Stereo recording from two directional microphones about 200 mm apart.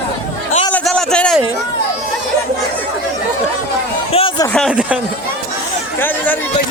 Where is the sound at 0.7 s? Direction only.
5° left (ahead or behind).